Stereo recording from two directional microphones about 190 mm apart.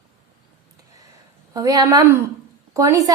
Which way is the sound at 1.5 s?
20° right (ahead or behind).